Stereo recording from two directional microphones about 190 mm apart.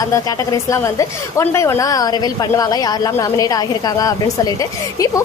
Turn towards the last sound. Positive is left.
turn(degrees=15)  # may be behind; listen again after turning